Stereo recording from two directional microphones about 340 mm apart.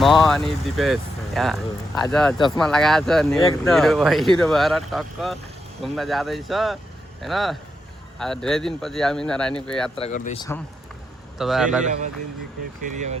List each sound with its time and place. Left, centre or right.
0.0 s speech: centre
9.9 s speech: centre
11.3 s speech: centre
12.9 s speech: right